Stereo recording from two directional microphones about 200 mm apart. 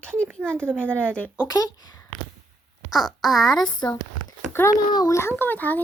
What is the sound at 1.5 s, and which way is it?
Speech, 20° left (ahead or behind).